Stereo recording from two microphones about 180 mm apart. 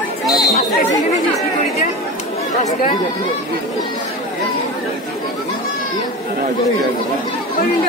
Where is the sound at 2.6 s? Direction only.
50° left (ahead or behind).